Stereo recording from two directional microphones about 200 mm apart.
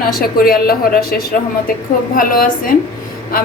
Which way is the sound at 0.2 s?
50° left (ahead or behind).